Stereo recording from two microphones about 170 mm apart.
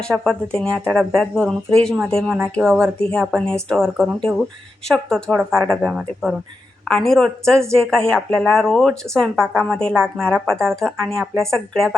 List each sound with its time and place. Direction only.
0.0 s speech: 5° left (ahead or behind)